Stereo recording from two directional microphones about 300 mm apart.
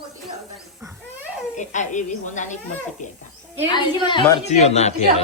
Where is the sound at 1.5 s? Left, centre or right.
Left.